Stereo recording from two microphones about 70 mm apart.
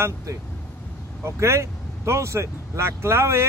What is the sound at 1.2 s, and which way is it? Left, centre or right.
Speech, right.